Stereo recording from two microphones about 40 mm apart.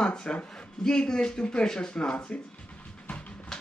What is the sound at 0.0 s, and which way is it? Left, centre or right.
Speech, left.